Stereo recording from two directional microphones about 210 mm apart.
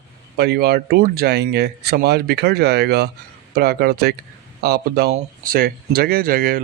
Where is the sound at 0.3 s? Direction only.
50° right (ahead or behind).